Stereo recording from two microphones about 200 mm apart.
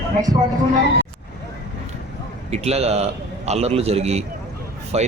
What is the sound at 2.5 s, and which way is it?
A man's voice, 30° right (ahead or behind).